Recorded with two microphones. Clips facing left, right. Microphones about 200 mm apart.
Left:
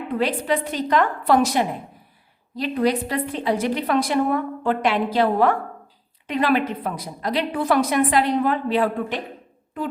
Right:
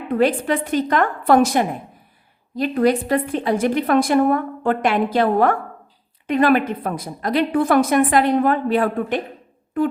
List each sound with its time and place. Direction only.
0.2 s a woman's voice: 50° right (ahead or behind)